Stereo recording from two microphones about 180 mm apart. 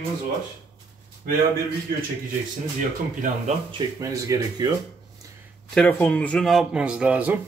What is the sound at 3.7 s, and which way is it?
Speech, 20° right (ahead or behind).